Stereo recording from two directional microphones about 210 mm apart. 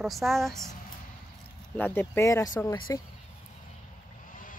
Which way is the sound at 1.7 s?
10° left (ahead or behind).